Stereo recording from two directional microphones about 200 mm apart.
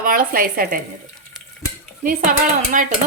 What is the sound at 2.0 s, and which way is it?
Speech, 40° right (ahead or behind).